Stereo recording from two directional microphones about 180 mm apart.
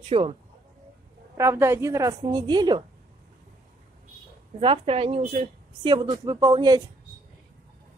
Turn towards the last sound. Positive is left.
turn(degrees=-20)  # may be behind; listen again after turning